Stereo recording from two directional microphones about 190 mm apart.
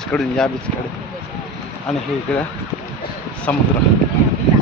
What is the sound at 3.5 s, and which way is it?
Speech, 10° left (ahead or behind).